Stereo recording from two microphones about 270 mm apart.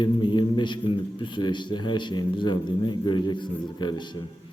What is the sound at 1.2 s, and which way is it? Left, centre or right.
A man's voice, centre.